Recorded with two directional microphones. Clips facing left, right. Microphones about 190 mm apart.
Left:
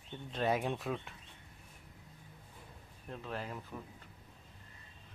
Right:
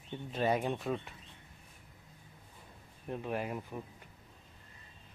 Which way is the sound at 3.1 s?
15° right (ahead or behind).